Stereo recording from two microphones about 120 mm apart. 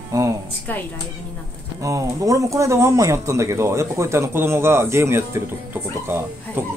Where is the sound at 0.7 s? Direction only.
15° left (ahead or behind).